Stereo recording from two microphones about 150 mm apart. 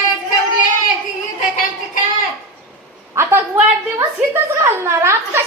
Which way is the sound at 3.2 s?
15° right (ahead or behind).